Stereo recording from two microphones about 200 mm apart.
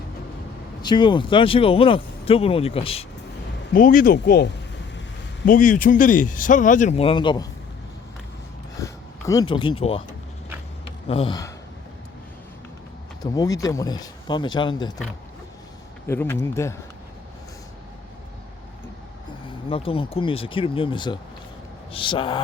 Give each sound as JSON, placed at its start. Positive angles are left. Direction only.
{"t": 0.8, "sound": "speech", "side_deg": 20}
{"t": 3.8, "sound": "speech", "side_deg": 45}
{"t": 5.5, "sound": "speech", "side_deg": 40}
{"t": 8.7, "sound": "a sound", "side_deg": 15}
{"t": 11.1, "sound": "speech", "side_deg": 30}
{"t": 13.3, "sound": "speech", "side_deg": 20}
{"t": 16.0, "sound": "speech", "side_deg": 10}
{"t": 19.6, "sound": "speech", "side_deg": 30}